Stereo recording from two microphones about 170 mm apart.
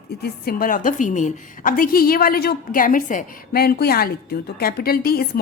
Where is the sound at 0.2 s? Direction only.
65° left (ahead or behind).